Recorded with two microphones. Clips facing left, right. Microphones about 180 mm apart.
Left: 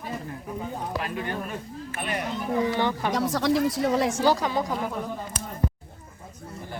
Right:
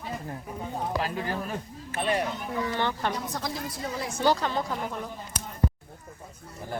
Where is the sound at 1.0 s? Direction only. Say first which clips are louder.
Even; 30° right (ahead or behind).